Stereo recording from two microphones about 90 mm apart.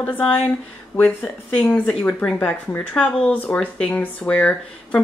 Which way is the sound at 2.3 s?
20° left (ahead or behind).